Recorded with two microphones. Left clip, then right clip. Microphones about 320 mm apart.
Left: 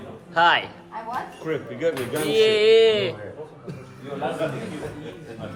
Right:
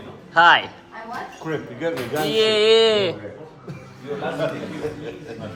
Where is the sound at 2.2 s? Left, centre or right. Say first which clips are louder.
Right 1 dB; centre.